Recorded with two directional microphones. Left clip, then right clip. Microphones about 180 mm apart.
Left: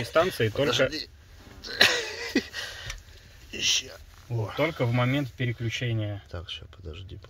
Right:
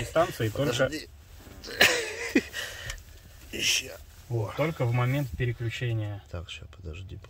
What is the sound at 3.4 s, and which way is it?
Speech, 25° right (ahead or behind).